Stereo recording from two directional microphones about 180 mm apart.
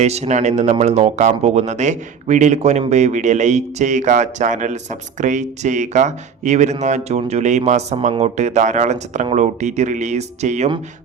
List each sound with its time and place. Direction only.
0.0 s speech: 40° right (ahead or behind)